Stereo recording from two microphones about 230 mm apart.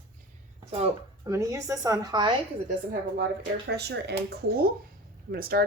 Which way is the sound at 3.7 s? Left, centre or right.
Right.